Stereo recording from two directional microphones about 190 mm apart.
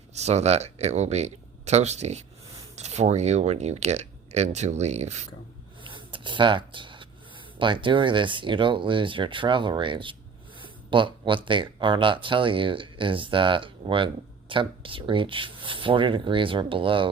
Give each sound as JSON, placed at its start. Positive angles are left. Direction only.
{"t": 0.1, "sound": "speech", "side_deg": -35}
{"t": 5.8, "sound": "a sound", "side_deg": -25}
{"t": 7.6, "sound": "speech", "side_deg": -25}